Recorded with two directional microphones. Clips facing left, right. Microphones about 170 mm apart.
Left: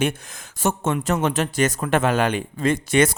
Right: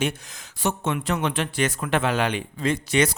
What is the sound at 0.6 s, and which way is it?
Speech, 45° left (ahead or behind).